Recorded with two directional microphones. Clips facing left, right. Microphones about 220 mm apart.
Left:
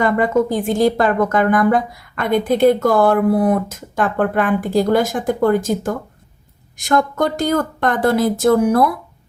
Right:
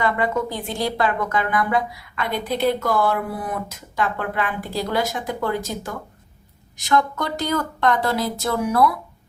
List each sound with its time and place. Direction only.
0.0 s speech: 45° left (ahead or behind)